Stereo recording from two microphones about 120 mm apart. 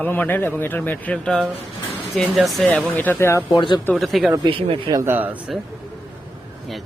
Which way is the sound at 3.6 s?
40° left (ahead or behind).